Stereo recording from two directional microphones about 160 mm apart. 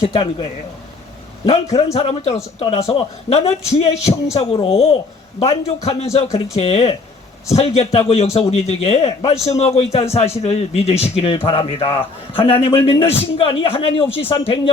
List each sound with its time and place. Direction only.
1.7 s a man's voice: 40° left (ahead or behind)